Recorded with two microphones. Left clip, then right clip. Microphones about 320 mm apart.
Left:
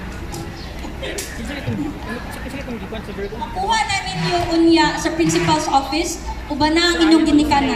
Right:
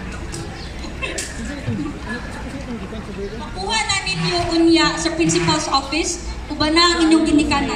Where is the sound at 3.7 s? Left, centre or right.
Centre.